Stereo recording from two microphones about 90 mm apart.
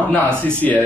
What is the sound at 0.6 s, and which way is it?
Speech, 15° left (ahead or behind).